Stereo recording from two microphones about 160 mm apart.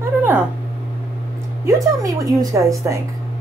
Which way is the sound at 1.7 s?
20° right (ahead or behind).